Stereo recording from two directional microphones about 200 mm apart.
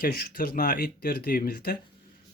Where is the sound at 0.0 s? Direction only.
45° left (ahead or behind).